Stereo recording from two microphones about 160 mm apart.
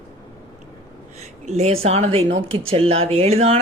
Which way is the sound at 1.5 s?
40° right (ahead or behind).